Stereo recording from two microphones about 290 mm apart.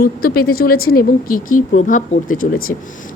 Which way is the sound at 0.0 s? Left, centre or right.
Left.